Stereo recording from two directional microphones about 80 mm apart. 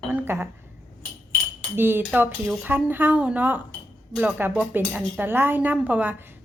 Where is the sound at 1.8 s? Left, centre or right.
Right.